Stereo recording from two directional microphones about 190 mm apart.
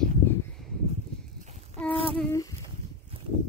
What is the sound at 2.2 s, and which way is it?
Speech, 15° left (ahead or behind).